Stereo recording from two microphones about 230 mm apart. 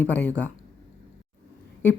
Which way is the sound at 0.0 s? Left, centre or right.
Centre.